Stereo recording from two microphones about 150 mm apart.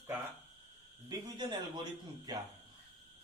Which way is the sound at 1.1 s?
30° right (ahead or behind).